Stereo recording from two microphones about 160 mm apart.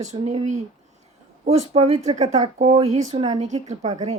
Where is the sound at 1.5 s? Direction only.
40° right (ahead or behind).